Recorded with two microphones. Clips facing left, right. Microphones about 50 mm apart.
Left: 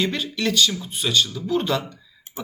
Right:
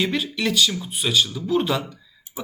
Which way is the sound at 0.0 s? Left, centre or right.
Centre.